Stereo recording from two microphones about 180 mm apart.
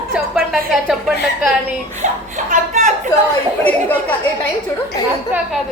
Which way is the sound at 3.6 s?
10° left (ahead or behind).